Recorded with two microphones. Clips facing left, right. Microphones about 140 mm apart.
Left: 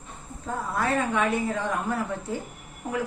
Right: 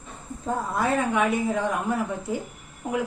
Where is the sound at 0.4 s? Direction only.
15° right (ahead or behind).